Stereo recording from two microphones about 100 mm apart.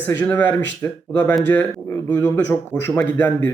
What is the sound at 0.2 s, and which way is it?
Speech, 15° left (ahead or behind).